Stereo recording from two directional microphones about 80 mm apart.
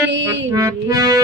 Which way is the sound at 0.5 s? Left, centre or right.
Right.